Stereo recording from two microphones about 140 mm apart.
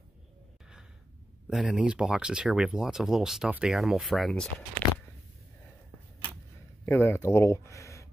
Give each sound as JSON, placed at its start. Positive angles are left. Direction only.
{"t": 1.5, "sound": "speech", "side_deg": -5}
{"t": 6.9, "sound": "speech", "side_deg": 20}